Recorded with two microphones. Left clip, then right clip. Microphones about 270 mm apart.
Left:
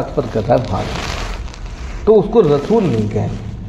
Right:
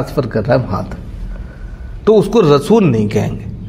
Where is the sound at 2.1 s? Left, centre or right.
Right.